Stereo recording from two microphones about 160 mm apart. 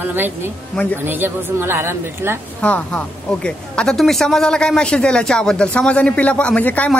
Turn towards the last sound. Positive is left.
turn(degrees=10)  # may be behind; listen again after turning